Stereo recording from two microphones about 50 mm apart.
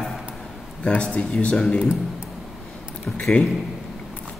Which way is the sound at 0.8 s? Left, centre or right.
Left.